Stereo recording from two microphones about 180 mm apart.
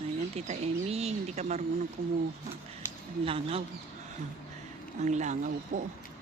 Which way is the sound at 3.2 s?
30° right (ahead or behind).